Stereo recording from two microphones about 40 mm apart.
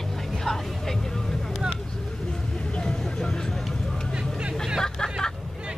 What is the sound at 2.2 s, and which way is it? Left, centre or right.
Vehicle, left.